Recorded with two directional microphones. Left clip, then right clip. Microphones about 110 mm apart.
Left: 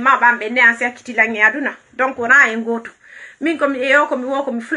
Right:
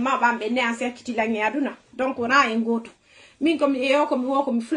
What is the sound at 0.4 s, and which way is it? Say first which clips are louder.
A woman's voice: left 11 dB; 30° right (ahead or behind).